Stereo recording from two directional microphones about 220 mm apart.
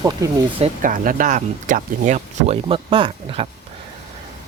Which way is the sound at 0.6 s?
40° right (ahead or behind).